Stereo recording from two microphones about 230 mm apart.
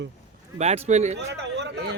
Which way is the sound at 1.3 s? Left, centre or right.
Right.